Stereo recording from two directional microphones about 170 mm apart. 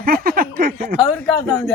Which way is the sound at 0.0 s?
60° right (ahead or behind).